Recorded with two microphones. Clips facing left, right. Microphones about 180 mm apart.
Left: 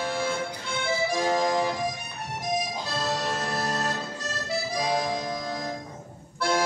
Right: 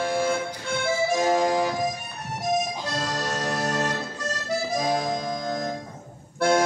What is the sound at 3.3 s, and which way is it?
Music, 45° right (ahead or behind).